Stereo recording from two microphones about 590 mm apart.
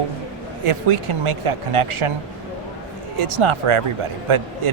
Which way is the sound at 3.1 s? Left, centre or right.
Right.